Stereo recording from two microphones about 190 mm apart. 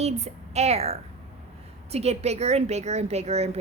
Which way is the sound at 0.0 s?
35° right (ahead or behind).